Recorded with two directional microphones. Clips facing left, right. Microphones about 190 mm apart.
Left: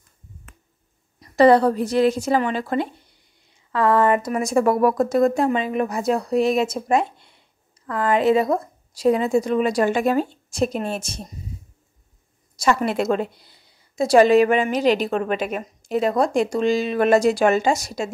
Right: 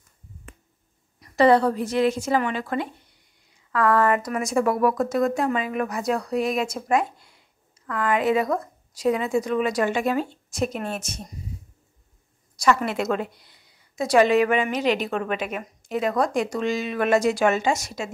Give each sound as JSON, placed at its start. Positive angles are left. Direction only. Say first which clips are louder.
{"t": 1.3, "sound": "a woman's voice", "louder": "left 3 dB", "side_deg": 35}
{"t": 12.5, "sound": "a woman's voice", "louder": "left 2 dB", "side_deg": 30}